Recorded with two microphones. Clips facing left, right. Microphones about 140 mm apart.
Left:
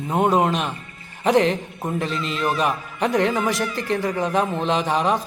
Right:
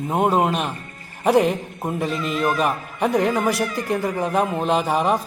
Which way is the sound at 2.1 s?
55° right (ahead or behind).